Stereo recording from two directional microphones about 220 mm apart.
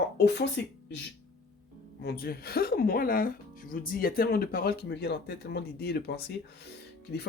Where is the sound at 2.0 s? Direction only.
45° left (ahead or behind).